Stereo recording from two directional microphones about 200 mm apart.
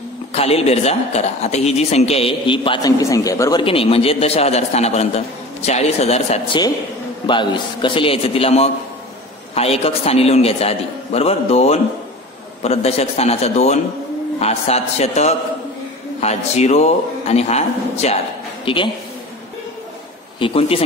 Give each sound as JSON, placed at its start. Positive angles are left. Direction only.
{"t": 0.3, "sound": "a woman's voice", "side_deg": 30}
{"t": 20.3, "sound": "a man's voice", "side_deg": 30}